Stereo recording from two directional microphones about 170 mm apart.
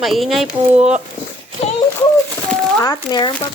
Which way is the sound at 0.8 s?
40° right (ahead or behind).